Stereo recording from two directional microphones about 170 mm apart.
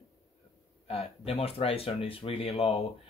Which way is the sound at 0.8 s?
35° left (ahead or behind).